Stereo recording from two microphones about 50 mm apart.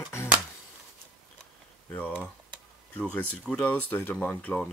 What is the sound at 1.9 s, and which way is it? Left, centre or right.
Computer keyboard, left.